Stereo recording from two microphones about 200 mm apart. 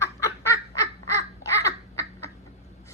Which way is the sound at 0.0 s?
15° left (ahead or behind).